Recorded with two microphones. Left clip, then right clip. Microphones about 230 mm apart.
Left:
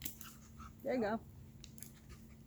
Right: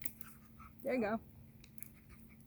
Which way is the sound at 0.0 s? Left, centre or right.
Right.